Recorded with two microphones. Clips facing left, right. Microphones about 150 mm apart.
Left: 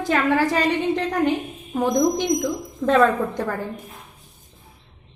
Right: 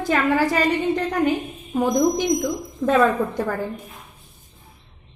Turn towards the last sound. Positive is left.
turn(degrees=-5)  # may be behind; listen again after turning